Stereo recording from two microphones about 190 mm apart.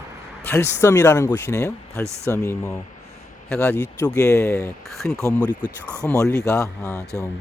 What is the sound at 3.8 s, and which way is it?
Speech, 15° left (ahead or behind).